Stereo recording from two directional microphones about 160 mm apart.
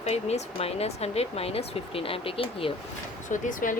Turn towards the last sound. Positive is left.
turn(degrees=55)  # may be behind; listen again after turning